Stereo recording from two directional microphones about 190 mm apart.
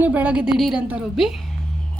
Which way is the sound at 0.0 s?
10° right (ahead or behind).